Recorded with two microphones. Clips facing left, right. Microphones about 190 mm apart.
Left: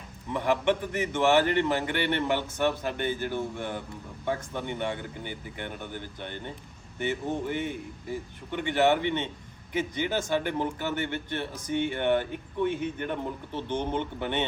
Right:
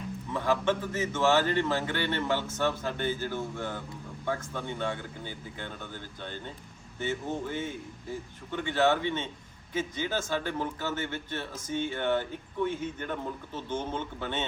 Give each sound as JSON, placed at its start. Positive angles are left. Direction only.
{"t": 0.3, "sound": "speech", "side_deg": 15}